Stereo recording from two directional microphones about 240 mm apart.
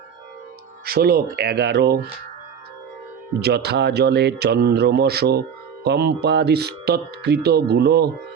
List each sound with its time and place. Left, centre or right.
0.9 s speech: right
3.4 s speech: right